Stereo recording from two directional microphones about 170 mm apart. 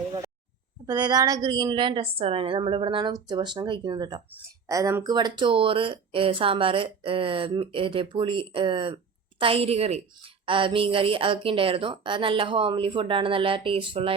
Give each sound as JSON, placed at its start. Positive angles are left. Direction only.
{"t": 0.9, "sound": "a woman's voice", "side_deg": -25}